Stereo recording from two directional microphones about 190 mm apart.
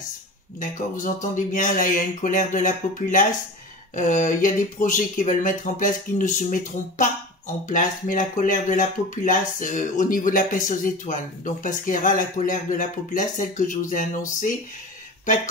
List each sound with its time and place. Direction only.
0.6 s speech: 45° left (ahead or behind)